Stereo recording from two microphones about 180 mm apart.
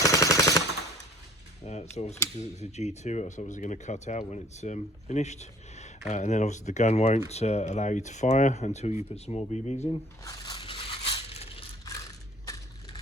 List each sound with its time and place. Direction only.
0.0 s machine gun: 20° left (ahead or behind)
1.6 s speech: 35° left (ahead or behind)
10.2 s crushing: 20° left (ahead or behind)